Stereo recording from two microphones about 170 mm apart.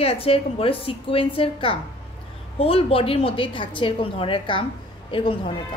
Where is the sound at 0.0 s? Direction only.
35° left (ahead or behind).